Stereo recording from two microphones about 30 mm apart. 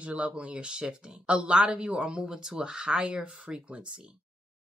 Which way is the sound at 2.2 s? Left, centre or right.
Right.